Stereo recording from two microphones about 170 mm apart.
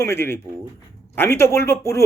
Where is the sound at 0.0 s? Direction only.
15° left (ahead or behind).